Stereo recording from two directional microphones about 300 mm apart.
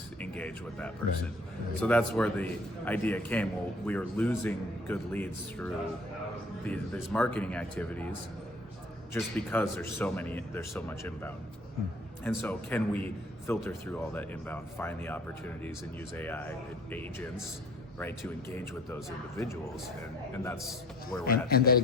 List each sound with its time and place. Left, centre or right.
0.2 s a man's voice: centre
9.1 s a man's voice: centre
18.5 s a man's voice: centre
21.2 s a man's voice: left